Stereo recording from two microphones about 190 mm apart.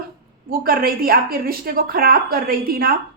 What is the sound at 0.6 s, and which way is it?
A woman's voice, 50° right (ahead or behind).